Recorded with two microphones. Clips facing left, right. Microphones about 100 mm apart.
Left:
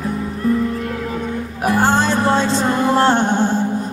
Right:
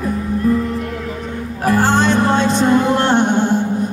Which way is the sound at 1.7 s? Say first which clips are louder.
Right 2 dB; 20° left (ahead or behind).